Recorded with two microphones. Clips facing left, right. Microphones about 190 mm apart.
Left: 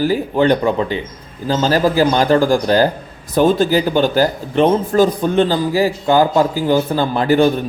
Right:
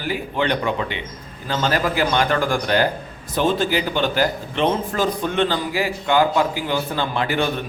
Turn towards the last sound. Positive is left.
turn(degrees=40)  # may be behind; listen again after turning